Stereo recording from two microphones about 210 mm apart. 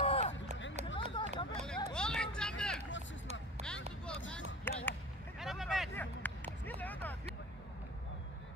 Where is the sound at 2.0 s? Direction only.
5° left (ahead or behind).